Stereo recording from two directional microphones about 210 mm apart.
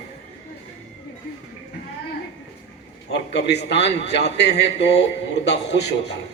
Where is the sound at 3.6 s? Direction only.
55° left (ahead or behind).